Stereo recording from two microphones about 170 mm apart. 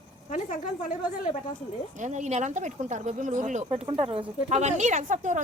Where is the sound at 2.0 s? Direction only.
45° right (ahead or behind).